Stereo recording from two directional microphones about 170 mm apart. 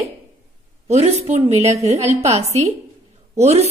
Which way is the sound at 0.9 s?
40° right (ahead or behind).